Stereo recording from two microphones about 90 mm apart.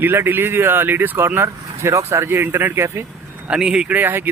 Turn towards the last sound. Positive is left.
turn(degrees=-25)  # may be behind; listen again after turning